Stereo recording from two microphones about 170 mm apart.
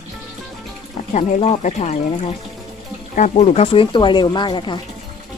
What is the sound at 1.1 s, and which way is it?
Speech, 40° left (ahead or behind).